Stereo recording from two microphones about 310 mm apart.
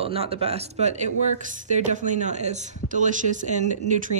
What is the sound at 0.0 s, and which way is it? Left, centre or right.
A woman's voice, centre.